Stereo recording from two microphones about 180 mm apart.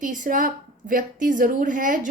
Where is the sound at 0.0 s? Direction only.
45° right (ahead or behind).